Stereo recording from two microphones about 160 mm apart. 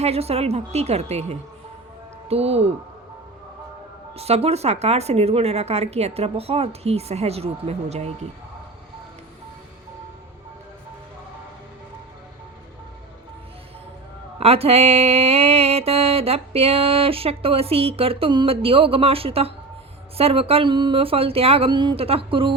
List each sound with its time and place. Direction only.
0.0 s music: 40° right (ahead or behind)
4.1 s music: 40° right (ahead or behind)
14.3 s music: 40° right (ahead or behind)